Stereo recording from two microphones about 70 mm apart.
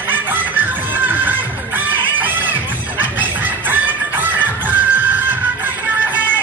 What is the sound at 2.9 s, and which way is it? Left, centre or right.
Chicken, right.